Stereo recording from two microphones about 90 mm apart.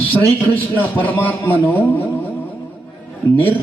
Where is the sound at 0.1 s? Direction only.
20° left (ahead or behind).